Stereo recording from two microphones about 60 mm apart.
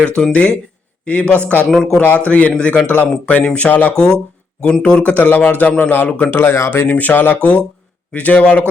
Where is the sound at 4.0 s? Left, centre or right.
Centre.